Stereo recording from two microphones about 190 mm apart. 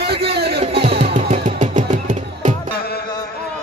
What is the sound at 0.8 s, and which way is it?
Music, 30° right (ahead or behind).